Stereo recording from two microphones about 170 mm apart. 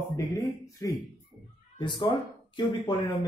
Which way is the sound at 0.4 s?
20° left (ahead or behind).